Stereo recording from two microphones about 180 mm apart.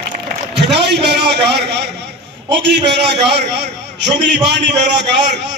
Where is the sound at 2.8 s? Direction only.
70° right (ahead or behind).